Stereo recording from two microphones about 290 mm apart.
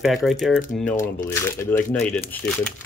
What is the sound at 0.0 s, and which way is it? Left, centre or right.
Speech, centre.